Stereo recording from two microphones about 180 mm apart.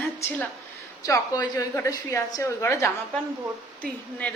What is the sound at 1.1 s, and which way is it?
A woman's voice, 20° left (ahead or behind).